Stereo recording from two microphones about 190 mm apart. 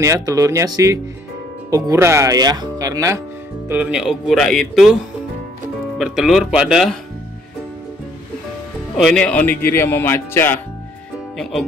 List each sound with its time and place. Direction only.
0.0 s speech: 15° right (ahead or behind); by 4.9 s centre (ahead or behind)
5.9 s speech: 5° right (ahead or behind)
8.9 s speech: centre (ahead or behind)